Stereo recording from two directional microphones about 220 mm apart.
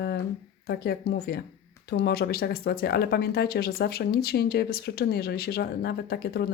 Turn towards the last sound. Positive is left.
turn(degrees=45)  # may be behind; listen again after turning